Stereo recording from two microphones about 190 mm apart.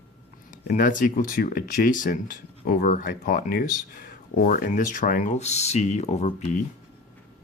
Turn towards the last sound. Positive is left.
turn(degrees=40)  # may be behind; listen again after turning